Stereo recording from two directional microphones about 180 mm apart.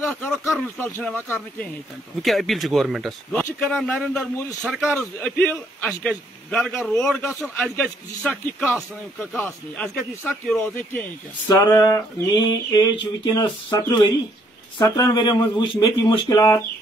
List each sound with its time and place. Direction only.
0.0 s a man's voice: centre (ahead or behind)
5.2 s a man's voice: 10° left (ahead or behind)
10.6 s speech: 10° left (ahead or behind)
11.4 s a sound: 20° left (ahead or behind)